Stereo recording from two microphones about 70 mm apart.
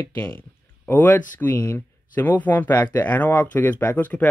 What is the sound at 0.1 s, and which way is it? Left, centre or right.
Speech, left.